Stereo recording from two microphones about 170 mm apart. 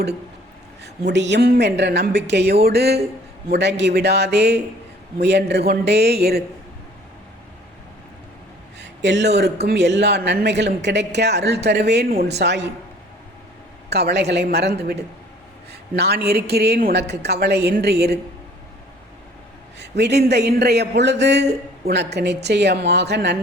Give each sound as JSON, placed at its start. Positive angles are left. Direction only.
{"t": 1.0, "sound": "a man's voice", "side_deg": -90}
{"t": 3.5, "sound": "a man's voice", "side_deg": -90}
{"t": 8.8, "sound": "speech", "side_deg": -90}
{"t": 9.6, "sound": "a man's voice", "side_deg": -90}
{"t": 12.4, "sound": "a woman's voice", "side_deg": -90}
{"t": 13.9, "sound": "a woman's voice", "side_deg": -75}
{"t": 19.8, "sound": "a man's voice", "side_deg": -85}